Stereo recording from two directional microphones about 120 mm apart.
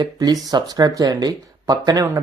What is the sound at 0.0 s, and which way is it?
Speech, 35° right (ahead or behind).